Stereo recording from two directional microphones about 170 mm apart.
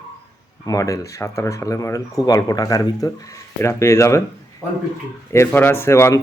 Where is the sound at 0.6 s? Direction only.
20° left (ahead or behind).